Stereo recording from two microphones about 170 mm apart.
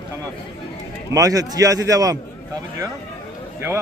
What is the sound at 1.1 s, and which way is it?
A man's voice, 20° right (ahead or behind).